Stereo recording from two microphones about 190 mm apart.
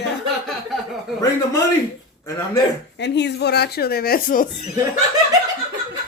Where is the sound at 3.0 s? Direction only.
65° left (ahead or behind); by 4.7 s 45° left (ahead or behind).